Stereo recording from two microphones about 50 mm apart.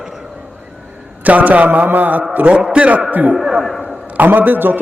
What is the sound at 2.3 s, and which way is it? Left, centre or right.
A man's voice, right.